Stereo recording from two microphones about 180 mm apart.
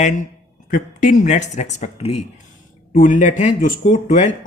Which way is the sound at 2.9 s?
45° left (ahead or behind).